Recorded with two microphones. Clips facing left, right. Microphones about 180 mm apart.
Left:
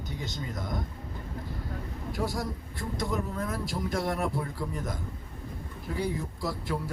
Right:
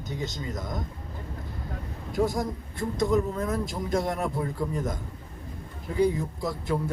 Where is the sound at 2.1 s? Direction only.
20° right (ahead or behind).